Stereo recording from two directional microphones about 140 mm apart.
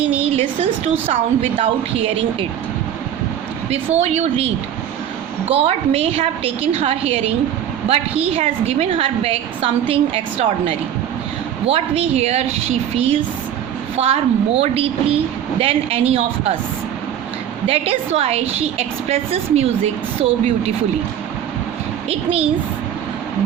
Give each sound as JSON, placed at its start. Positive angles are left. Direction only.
{"t": 0.3, "sound": "a woman's voice", "side_deg": -45}
{"t": 3.9, "sound": "a woman's voice", "side_deg": -50}
{"t": 17.7, "sound": "a woman's voice", "side_deg": -45}
{"t": 22.1, "sound": "a woman's voice", "side_deg": -45}